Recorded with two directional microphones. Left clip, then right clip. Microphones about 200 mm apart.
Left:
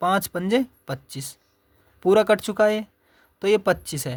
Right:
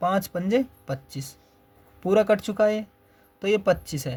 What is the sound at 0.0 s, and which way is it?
Speech, 40° left (ahead or behind).